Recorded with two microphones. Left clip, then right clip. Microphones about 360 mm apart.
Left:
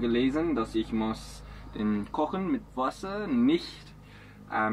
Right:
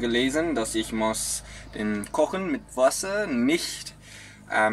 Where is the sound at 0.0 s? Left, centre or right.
Right.